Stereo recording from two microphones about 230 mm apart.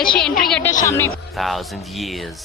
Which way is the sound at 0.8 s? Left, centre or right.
Centre.